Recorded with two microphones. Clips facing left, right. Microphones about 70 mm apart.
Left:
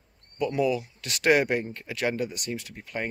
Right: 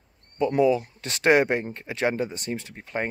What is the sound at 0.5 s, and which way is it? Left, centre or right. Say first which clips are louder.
Speech: right 5 dB; right.